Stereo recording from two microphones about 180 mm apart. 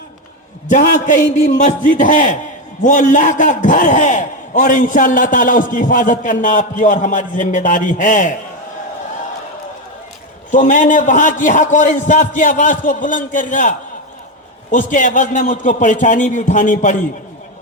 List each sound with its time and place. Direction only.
0.7 s a man's voice: 45° left (ahead or behind)
10.5 s a man's voice: 45° left (ahead or behind)